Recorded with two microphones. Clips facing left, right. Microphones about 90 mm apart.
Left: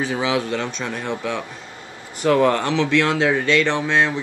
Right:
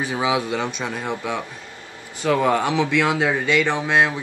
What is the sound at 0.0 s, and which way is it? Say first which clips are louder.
Speech: even; 15° right (ahead or behind).